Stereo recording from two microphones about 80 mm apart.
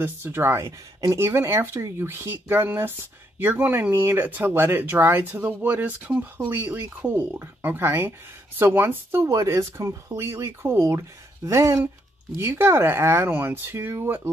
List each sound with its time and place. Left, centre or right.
0.0 s speech: right